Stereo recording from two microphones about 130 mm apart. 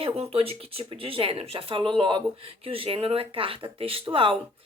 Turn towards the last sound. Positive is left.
turn(degrees=-40)  # may be behind; listen again after turning